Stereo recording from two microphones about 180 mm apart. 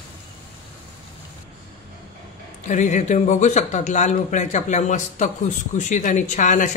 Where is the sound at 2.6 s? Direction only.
45° left (ahead or behind).